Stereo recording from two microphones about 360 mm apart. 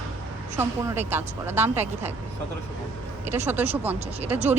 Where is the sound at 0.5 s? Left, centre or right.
Centre.